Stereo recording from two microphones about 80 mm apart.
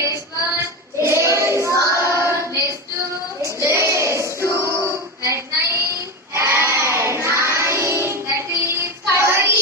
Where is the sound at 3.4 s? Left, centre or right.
Right.